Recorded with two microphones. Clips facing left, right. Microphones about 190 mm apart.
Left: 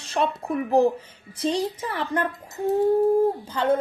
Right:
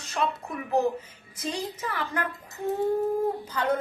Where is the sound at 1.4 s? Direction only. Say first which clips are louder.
Left 7 dB; 30° left (ahead or behind).